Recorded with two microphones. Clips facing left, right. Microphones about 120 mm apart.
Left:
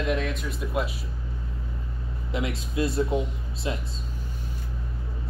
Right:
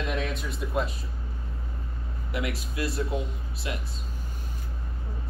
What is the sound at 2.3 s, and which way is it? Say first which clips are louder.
Speech: left 3 dB; 25° left (ahead or behind).